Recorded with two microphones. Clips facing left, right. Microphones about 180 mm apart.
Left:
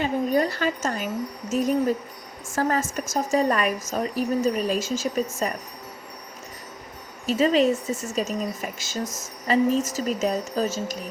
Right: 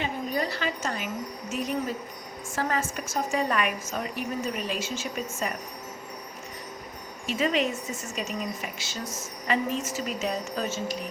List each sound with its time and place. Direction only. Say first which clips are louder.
0.0 s a woman's voice: left 7 dB; 45° left (ahead or behind)
7.3 s a woman's voice: left 7 dB; 35° left (ahead or behind)